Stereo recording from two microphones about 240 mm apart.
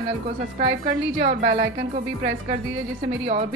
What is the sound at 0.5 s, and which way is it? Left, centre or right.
Speech, right.